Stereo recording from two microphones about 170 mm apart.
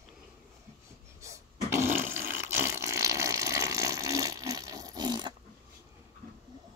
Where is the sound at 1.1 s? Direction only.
15° right (ahead or behind).